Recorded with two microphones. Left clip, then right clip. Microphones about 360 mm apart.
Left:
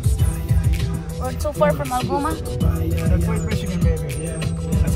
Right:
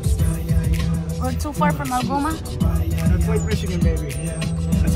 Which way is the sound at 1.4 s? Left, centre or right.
Centre.